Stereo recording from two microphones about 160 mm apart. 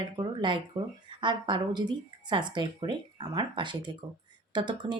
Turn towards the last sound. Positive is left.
turn(degrees=-30)  # may be behind; listen again after turning